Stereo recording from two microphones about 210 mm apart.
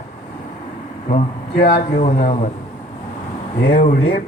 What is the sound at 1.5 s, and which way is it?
Speech, 45° left (ahead or behind).